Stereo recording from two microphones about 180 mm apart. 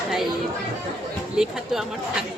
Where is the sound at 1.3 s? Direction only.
5° right (ahead or behind).